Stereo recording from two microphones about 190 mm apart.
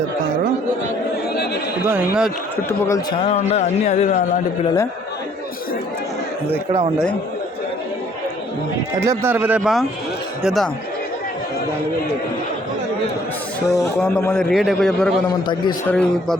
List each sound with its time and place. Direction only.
1.9 s a man's voice: 5° right (ahead or behind)
2.6 s a man's voice: 15° left (ahead or behind)
3.2 s speech: 35° left (ahead or behind)
9.0 s a man's voice: 15° right (ahead or behind)
13.7 s a man's voice: 20° left (ahead or behind)
13.9 s a man's voice: 5° left (ahead or behind)